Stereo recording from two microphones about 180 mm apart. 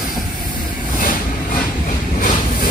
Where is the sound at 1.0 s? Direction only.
45° left (ahead or behind).